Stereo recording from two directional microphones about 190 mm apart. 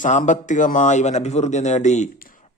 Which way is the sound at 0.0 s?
40° left (ahead or behind).